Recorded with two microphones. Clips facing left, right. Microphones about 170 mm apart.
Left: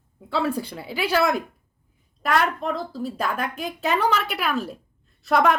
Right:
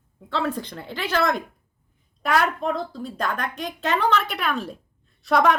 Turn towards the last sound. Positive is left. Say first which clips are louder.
# even
turn(degrees=0)  # may be behind; listen again after turning